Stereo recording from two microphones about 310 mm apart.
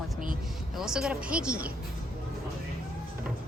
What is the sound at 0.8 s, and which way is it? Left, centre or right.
Speech, centre.